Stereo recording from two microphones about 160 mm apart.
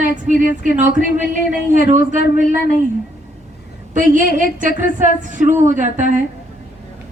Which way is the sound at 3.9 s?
50° right (ahead or behind).